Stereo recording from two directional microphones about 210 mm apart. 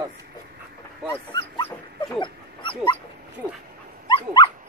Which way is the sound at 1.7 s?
15° left (ahead or behind).